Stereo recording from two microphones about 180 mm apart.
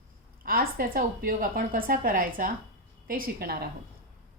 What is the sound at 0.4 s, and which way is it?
A woman's voice, 55° right (ahead or behind).